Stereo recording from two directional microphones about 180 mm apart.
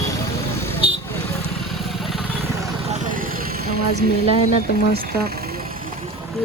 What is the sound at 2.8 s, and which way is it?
Vehicle, 40° right (ahead or behind).